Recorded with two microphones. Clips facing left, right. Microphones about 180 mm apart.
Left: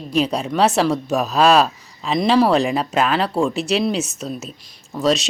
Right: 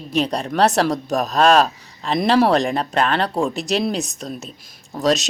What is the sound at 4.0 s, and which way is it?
Speech, 35° right (ahead or behind).